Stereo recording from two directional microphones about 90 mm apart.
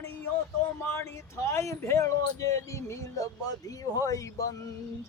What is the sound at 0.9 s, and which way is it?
Speech, 30° left (ahead or behind).